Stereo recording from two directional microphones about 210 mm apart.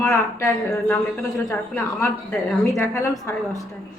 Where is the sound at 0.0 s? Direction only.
10° left (ahead or behind).